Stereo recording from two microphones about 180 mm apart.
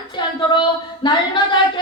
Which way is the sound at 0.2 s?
25° left (ahead or behind).